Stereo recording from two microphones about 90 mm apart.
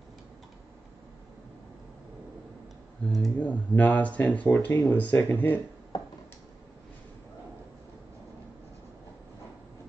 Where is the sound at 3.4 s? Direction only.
15° left (ahead or behind).